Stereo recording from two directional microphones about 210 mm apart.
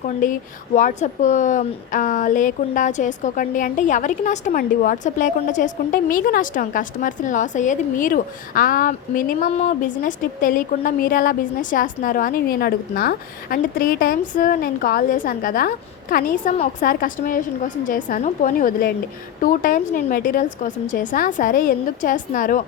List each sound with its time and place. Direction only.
0.2 s speech: 40° left (ahead or behind)